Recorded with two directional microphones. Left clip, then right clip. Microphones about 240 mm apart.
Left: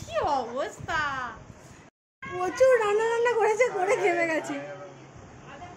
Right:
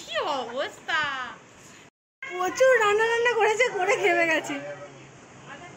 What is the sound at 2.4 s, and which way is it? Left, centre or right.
A woman's voice, centre.